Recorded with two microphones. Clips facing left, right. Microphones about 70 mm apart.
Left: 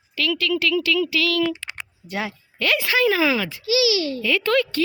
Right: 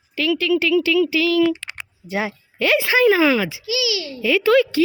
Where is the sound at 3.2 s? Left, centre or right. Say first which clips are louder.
Right 4 dB; centre.